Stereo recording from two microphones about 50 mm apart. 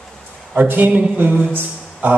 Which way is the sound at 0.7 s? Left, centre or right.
Right.